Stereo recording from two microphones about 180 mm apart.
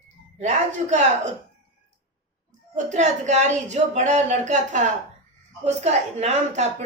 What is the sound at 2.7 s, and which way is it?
A man's voice, 45° right (ahead or behind).